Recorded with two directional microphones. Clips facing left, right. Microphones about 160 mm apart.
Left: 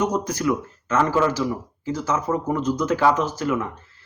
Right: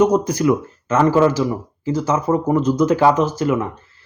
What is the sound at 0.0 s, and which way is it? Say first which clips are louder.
Speech: right 7 dB; 15° right (ahead or behind).